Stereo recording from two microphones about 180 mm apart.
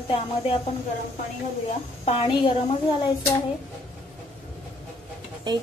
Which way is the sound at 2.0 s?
30° left (ahead or behind).